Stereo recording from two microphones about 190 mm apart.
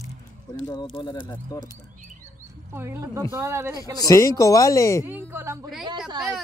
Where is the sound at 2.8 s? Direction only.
15° right (ahead or behind).